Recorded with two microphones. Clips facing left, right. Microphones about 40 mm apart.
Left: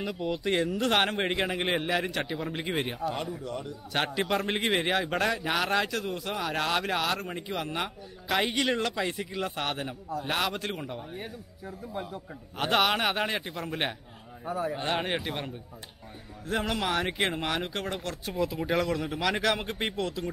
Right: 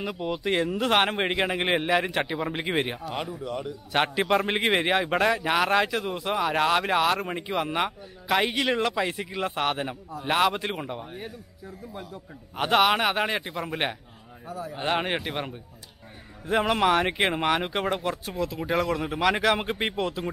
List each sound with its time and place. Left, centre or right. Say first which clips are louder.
0.0 s a man's voice: right 1 dB; centre
8.3 s a man's voice: right 3 dB; centre
11.1 s a man's voice: right 1 dB; centre
12.5 s a man's voice: right 4 dB; centre
14.5 s a man's voice: left 4 dB; left
14.8 s a man's voice: right 3 dB; centre
18.2 s a man's voice: even; centre